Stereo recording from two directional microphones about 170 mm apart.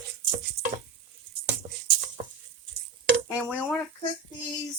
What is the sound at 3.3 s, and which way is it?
Speech, 10° right (ahead or behind).